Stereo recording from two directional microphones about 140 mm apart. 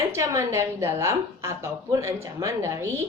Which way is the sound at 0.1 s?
20° right (ahead or behind).